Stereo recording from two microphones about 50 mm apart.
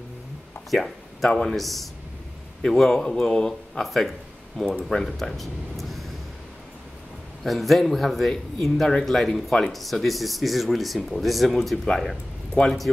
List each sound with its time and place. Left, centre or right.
0.7 s a man's voice: centre
3.8 s speech: centre
7.4 s a man's voice: centre
9.7 s speech: centre